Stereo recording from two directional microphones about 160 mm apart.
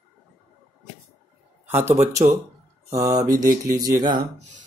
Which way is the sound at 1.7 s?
15° right (ahead or behind).